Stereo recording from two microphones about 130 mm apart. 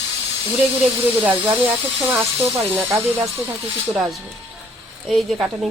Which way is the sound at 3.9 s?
5° right (ahead or behind).